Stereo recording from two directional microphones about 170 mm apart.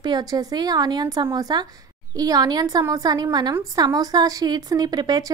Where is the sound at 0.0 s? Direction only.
25° right (ahead or behind).